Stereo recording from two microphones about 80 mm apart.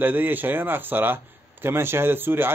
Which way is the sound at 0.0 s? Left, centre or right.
Right.